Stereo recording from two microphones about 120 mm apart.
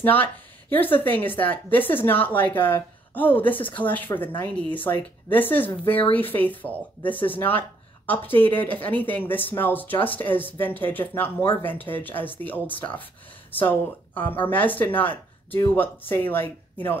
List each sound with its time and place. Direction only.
0.0 s speech: 15° left (ahead or behind)
5.9 s a woman's voice: 50° left (ahead or behind)
6.1 s speech: 15° left (ahead or behind)